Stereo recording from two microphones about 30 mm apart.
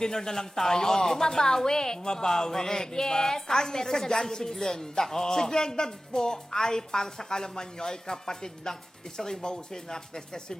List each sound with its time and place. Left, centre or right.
0.0 s a woman's voice: centre